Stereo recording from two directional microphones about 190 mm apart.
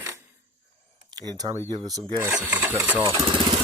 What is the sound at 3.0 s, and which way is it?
Speech, 25° right (ahead or behind).